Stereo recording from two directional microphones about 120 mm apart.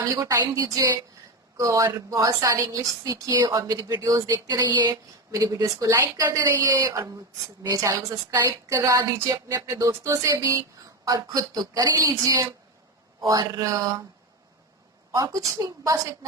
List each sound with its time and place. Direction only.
0.1 s speech: 30° right (ahead or behind)
15.1 s speech: 30° right (ahead or behind)